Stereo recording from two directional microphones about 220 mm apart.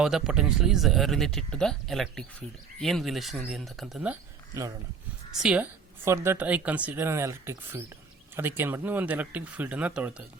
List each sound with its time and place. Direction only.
0.0 s speech: centre (ahead or behind)